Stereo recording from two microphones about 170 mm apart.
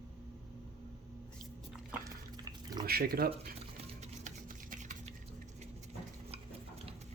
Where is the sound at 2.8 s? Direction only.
65° right (ahead or behind).